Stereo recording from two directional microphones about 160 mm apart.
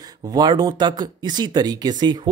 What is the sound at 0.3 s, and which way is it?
Speech, 25° right (ahead or behind).